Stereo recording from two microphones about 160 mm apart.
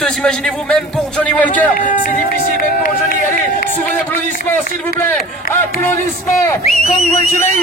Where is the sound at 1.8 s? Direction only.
55° left (ahead or behind).